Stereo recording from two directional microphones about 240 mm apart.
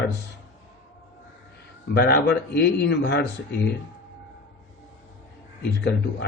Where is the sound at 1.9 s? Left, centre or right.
Left.